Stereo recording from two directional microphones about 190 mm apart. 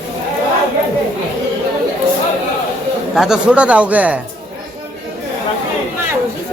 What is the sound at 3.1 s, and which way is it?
Speech, 5° right (ahead or behind).